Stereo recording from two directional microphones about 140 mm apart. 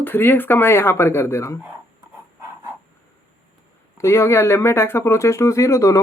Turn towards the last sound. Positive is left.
turn(degrees=20)  # may be behind; listen again after turning